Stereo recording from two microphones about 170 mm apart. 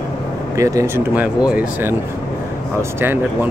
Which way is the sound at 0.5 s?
20° right (ahead or behind).